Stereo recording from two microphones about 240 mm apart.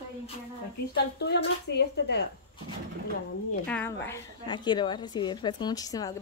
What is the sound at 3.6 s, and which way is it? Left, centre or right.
A woman's voice, centre.